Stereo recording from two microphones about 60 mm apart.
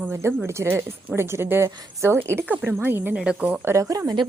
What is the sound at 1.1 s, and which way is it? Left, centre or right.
A woman's voice, right.